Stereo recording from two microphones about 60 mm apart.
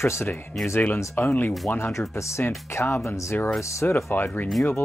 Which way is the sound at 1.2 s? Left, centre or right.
Left.